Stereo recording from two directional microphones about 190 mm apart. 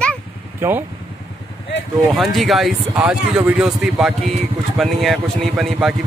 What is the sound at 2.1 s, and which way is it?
A man's voice, centre (ahead or behind).